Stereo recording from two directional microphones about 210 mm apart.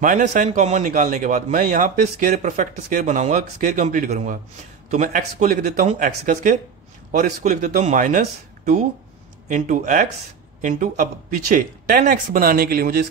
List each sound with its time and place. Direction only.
0.0 s a man's voice: 40° right (ahead or behind)
9.5 s a man's voice: 40° right (ahead or behind)